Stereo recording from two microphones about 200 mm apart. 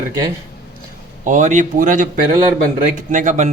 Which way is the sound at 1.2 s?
35° right (ahead or behind).